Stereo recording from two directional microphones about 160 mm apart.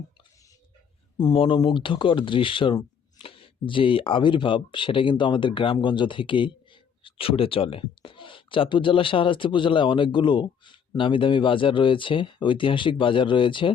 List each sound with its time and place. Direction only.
1.2 s speech: 30° left (ahead or behind)